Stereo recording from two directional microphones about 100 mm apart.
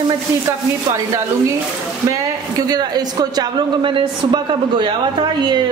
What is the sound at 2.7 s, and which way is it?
Speech, 40° right (ahead or behind).